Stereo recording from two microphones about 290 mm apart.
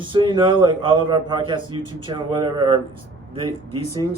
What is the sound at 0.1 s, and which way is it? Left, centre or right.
A man's voice, centre.